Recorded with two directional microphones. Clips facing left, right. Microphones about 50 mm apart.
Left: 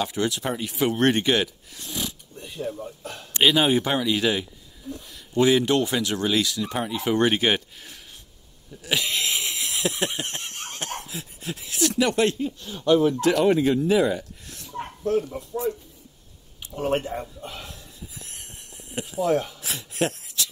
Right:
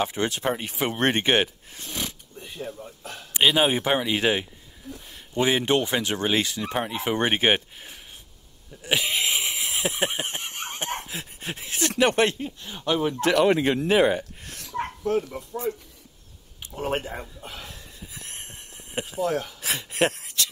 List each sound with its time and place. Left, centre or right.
0.0 s speech: right
3.3 s a man's voice: centre
8.8 s a sound: right
11.0 s speech: right
12.4 s speech: right
13.2 s speech: right
14.6 s chuckle: right
18.0 s a sound: right
19.2 s speech: centre
19.6 s speech: right